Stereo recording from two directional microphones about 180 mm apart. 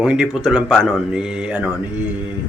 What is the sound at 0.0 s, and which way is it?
Speech, 5° right (ahead or behind).